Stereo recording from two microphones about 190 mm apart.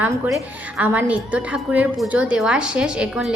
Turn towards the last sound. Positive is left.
turn(degrees=-5)  # may be behind; listen again after turning